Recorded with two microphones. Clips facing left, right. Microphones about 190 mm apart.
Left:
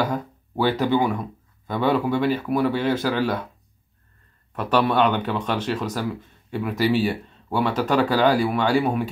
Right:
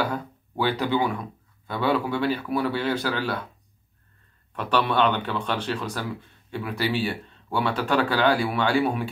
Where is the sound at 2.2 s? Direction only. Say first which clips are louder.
Left 4 dB; 10° left (ahead or behind).